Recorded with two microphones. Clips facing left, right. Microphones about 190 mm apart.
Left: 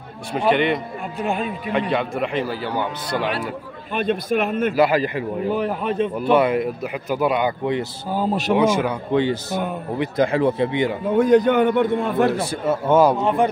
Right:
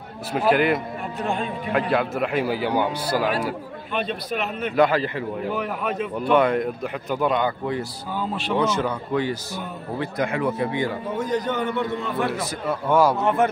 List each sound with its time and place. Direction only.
0.3 s a man's voice: 5° right (ahead or behind)
1.2 s speech: 15° left (ahead or behind)
1.7 s a man's voice: centre (ahead or behind)
3.9 s a man's voice: 45° left (ahead or behind)
4.7 s speech: 10° left (ahead or behind)
5.5 s a man's voice: 30° left (ahead or behind)
6.3 s speech: 5° left (ahead or behind)
8.1 s a man's voice: 40° left (ahead or behind)
8.5 s speech: 10° left (ahead or behind)
9.1 s a man's voice: 25° left (ahead or behind)
11.1 s a man's voice: 60° left (ahead or behind)
12.4 s a man's voice: 25° left (ahead or behind)